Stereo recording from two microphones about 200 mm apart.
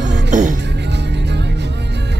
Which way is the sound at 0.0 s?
60° right (ahead or behind).